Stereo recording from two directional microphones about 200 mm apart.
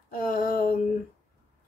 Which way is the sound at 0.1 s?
45° left (ahead or behind).